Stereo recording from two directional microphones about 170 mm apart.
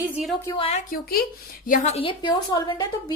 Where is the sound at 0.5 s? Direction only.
35° left (ahead or behind).